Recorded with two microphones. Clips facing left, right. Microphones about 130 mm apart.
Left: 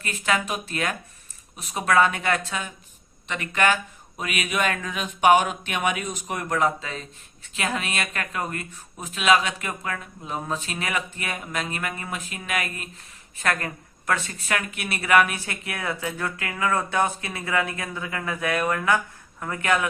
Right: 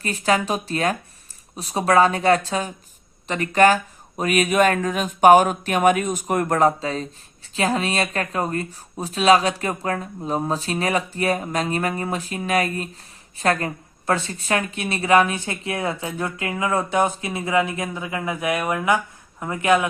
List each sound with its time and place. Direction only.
0.0 s a woman's voice: 35° right (ahead or behind)